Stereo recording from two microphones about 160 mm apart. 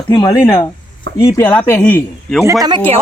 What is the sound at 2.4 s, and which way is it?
Speech, 20° right (ahead or behind).